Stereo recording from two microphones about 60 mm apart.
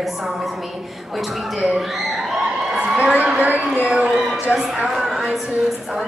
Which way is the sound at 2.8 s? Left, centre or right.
Centre.